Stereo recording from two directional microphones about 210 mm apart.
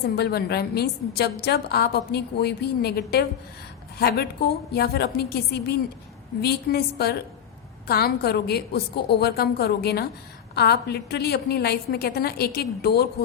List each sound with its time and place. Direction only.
0.2 s a woman's voice: 50° left (ahead or behind)